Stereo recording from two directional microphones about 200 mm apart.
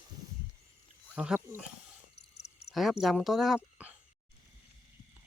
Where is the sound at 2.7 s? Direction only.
Centre (ahead or behind).